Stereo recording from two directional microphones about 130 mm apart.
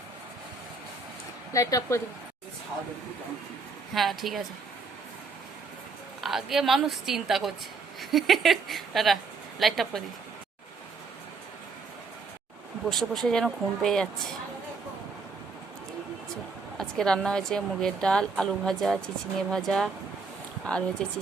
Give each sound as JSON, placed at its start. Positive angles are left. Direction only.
{"t": 1.5, "sound": "speech", "side_deg": 25}
{"t": 3.9, "sound": "a woman's voice", "side_deg": 0}
{"t": 6.2, "sound": "a woman's voice", "side_deg": 0}
{"t": 12.9, "sound": "a woman's voice", "side_deg": 0}
{"t": 16.7, "sound": "a woman's voice", "side_deg": 5}
{"t": 21.0, "sound": "a woman's voice", "side_deg": 5}